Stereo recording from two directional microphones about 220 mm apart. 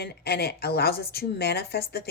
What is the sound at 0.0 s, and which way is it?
Speech, 45° left (ahead or behind).